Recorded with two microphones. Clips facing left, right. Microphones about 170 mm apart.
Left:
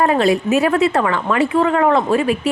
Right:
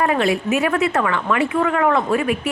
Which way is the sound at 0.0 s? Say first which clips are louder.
Left 3 dB; 35° left (ahead or behind).